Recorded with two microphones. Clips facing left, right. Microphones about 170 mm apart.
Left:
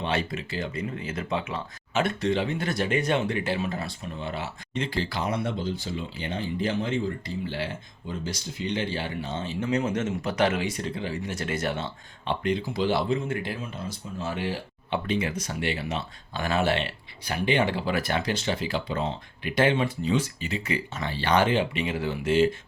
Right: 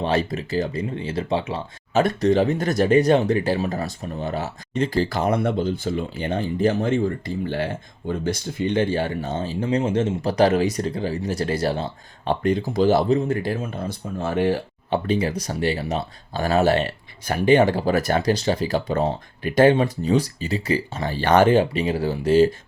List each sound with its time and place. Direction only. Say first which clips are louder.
0.0 s speech: right 6 dB; 40° right (ahead or behind)